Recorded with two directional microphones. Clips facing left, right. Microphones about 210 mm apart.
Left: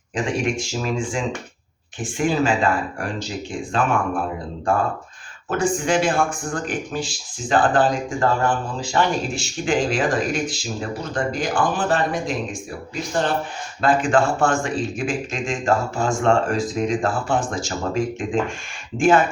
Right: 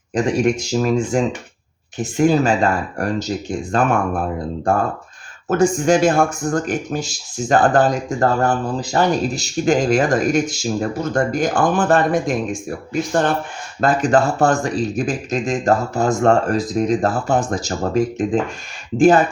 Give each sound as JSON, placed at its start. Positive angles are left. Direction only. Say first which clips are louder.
{"t": 0.1, "sound": "speech", "louder": "right 6 dB", "side_deg": -40}
{"t": 13.8, "sound": "speech", "louder": "right 2 dB", "side_deg": -40}